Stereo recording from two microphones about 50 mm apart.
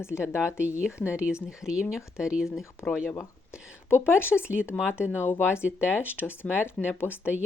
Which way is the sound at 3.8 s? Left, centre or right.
Left.